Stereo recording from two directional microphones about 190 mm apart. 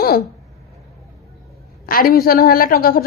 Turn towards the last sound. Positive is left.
turn(degrees=50)  # may be behind; listen again after turning